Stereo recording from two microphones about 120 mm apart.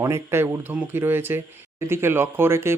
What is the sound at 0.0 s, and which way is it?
Speech, 20° right (ahead or behind).